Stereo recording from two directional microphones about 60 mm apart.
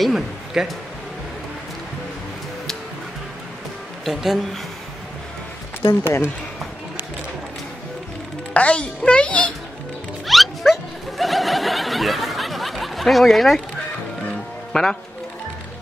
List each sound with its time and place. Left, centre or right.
0.0 s speech: centre
4.0 s speech: centre
5.9 s speech: left
8.5 s a child's voice: left
10.2 s music: centre